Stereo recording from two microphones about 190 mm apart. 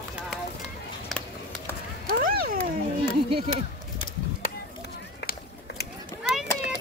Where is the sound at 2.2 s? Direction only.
50° right (ahead or behind).